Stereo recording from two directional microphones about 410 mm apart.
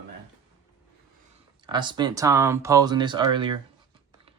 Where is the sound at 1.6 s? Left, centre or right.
Centre.